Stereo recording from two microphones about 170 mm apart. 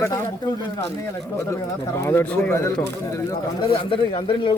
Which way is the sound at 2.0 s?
15° left (ahead or behind).